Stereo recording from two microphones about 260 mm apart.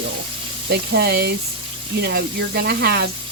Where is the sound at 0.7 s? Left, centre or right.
Right.